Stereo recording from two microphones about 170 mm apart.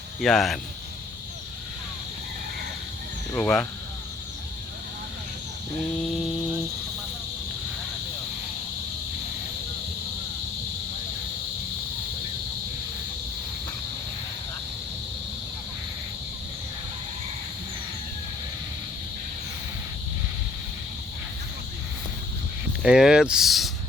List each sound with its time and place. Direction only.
0.2 s speech: centre (ahead or behind)
3.3 s speech: 5° left (ahead or behind)
22.8 s speech: 5° right (ahead or behind)